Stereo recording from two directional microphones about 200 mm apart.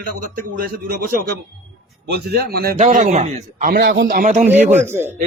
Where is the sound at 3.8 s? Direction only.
60° right (ahead or behind).